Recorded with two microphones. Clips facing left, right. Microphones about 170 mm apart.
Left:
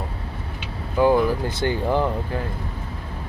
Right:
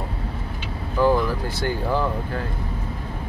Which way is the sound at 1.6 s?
20° left (ahead or behind).